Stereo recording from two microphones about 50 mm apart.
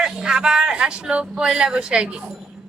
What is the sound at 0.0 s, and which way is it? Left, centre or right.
A woman's voice, centre.